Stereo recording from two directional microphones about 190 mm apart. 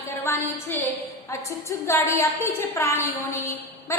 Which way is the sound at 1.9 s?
15° left (ahead or behind).